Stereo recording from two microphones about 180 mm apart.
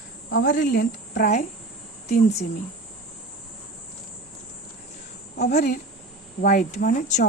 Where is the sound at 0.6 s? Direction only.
55° left (ahead or behind).